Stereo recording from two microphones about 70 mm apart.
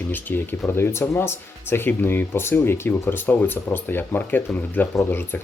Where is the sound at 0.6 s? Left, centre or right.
Left.